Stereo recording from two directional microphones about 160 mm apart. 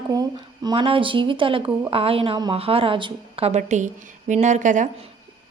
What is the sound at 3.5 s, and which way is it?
A woman's voice, 45° right (ahead or behind).